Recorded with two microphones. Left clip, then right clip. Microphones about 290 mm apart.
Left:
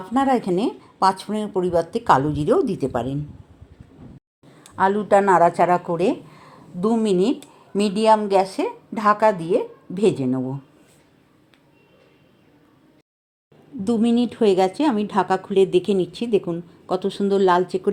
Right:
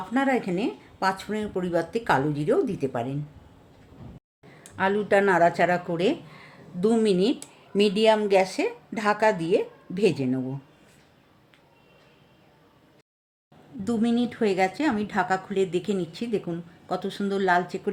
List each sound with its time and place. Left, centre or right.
0.1 s speech: centre
4.8 s speech: centre
14.2 s speech: centre